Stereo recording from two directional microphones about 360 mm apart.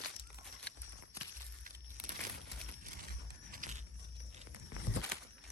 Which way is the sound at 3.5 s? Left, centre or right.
Right.